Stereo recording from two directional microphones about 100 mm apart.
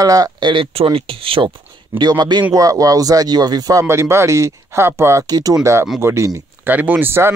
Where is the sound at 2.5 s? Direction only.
35° right (ahead or behind).